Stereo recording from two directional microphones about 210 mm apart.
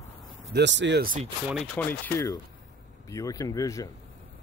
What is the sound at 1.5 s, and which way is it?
Speech, 5° left (ahead or behind).